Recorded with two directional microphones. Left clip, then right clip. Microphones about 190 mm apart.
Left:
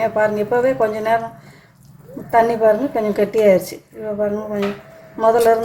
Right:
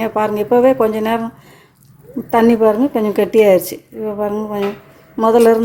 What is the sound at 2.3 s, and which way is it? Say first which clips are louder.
A woman's voice: right 2 dB; 45° right (ahead or behind).